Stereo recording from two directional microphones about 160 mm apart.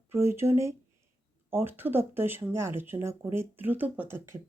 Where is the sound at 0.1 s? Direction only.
15° right (ahead or behind).